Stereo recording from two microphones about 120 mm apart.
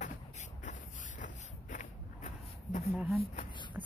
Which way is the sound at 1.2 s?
90° left.